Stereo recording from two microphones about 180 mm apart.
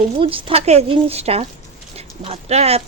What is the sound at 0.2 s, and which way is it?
Speech, 30° right (ahead or behind).